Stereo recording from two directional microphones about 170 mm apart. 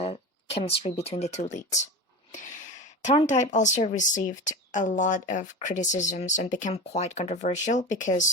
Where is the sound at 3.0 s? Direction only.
45° left (ahead or behind).